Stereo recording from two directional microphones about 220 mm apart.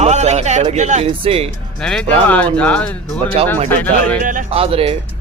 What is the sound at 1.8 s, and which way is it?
Speech, 5° left (ahead or behind).